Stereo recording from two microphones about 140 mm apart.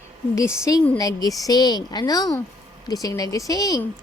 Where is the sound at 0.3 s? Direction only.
20° left (ahead or behind).